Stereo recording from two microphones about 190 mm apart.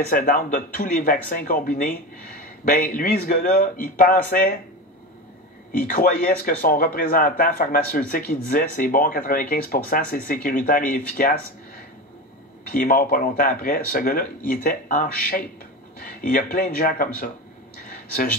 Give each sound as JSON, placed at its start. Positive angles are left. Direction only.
{"t": 0.1, "sound": "speech", "side_deg": 50}
{"t": 5.9, "sound": "speech", "side_deg": 45}
{"t": 12.7, "sound": "speech", "side_deg": 50}
{"t": 17.8, "sound": "a sound", "side_deg": 45}